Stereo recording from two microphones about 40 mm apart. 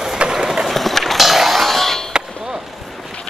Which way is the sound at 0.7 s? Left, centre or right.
Centre.